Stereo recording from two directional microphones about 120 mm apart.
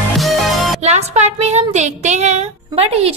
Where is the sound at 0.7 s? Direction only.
70° right (ahead or behind).